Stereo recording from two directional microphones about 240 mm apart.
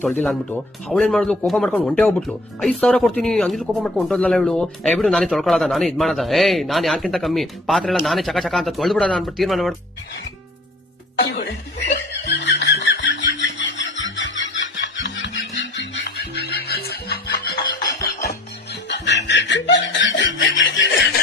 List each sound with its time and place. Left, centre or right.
0.0 s speech: centre
11.2 s music: left